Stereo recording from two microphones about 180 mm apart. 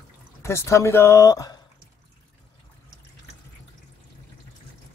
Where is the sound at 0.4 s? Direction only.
15° left (ahead or behind).